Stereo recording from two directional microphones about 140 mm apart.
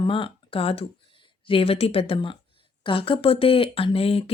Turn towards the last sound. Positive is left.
turn(degrees=45)  # may be behind; listen again after turning